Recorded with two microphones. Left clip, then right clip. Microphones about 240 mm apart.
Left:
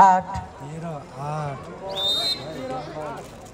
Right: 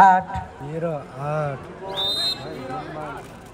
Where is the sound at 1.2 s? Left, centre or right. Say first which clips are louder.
Right 4 dB; centre.